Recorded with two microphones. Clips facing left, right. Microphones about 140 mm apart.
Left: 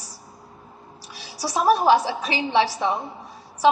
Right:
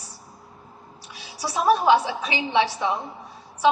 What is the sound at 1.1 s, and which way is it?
A woman's voice, 35° left (ahead or behind).